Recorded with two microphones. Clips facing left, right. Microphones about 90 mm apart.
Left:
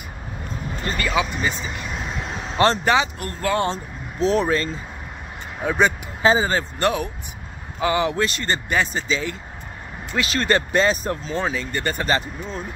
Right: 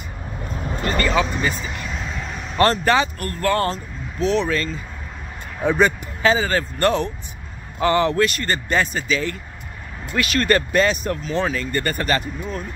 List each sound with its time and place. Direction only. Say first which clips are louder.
0.9 s speech: right 3 dB; 10° left (ahead or behind)
1.3 s vehicle: right 1 dB; 15° left (ahead or behind)
2.3 s speech: right 1 dB; 20° left (ahead or behind)
3.7 s speech: even; 35° left (ahead or behind)
5.6 s speech: right 2 dB; 10° left (ahead or behind)
6.2 s speech: even; 25° left (ahead or behind)
7.8 s speech: right 3 dB; 10° left (ahead or behind)
8.2 s speech: right 3 dB; 25° left (ahead or behind)
11.3 s speech: right 4 dB; 15° left (ahead or behind)